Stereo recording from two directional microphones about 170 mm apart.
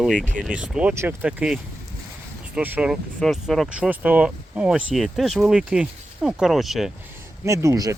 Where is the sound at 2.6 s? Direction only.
10° right (ahead or behind).